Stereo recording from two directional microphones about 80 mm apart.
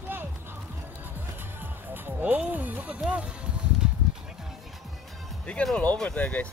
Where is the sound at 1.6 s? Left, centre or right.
Right.